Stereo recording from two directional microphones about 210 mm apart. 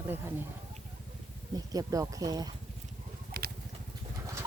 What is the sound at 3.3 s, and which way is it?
Vehicle, 45° right (ahead or behind).